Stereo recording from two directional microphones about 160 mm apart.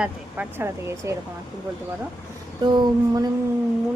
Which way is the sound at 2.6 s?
25° right (ahead or behind).